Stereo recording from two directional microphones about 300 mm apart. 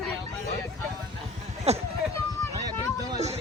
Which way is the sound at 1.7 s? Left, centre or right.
Right.